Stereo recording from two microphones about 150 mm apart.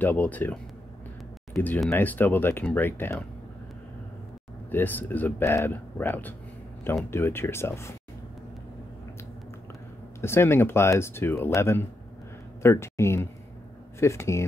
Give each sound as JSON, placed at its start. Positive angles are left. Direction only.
{"t": 0.0, "sound": "speech", "side_deg": 10}
{"t": 4.6, "sound": "speech", "side_deg": 10}
{"t": 10.2, "sound": "speech", "side_deg": 15}